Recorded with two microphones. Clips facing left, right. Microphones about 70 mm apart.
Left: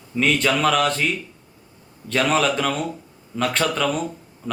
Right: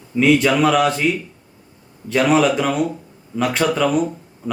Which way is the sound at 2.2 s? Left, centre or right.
Centre.